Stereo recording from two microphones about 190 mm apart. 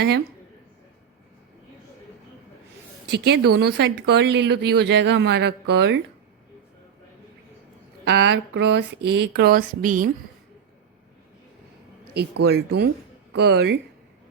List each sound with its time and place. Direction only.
3.1 s speech: 60° right (ahead or behind)
8.0 s speech: 65° right (ahead or behind); by 10.1 s 45° right (ahead or behind)
12.1 s speech: 60° right (ahead or behind)